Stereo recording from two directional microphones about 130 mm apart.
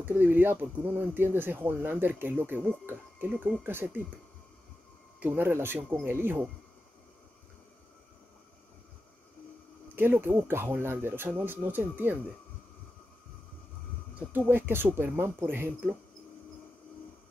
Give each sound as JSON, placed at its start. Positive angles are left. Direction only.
{"t": 0.0, "sound": "speech", "side_deg": -15}
{"t": 5.2, "sound": "speech", "side_deg": -15}
{"t": 9.9, "sound": "speech", "side_deg": -15}
{"t": 14.5, "sound": "speech", "side_deg": -15}